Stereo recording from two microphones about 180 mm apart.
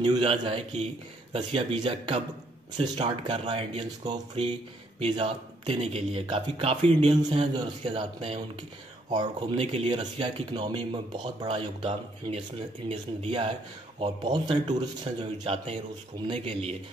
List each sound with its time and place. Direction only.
0.0 s speech: 30° right (ahead or behind)